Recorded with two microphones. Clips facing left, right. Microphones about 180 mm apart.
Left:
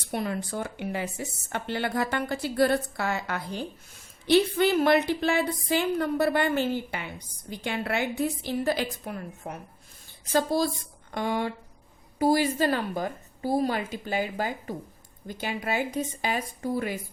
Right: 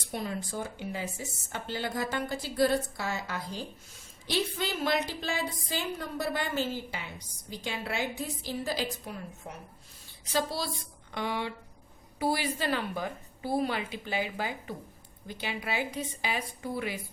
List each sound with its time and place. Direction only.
0.1 s a woman's voice: 65° left (ahead or behind); by 17.0 s 45° left (ahead or behind)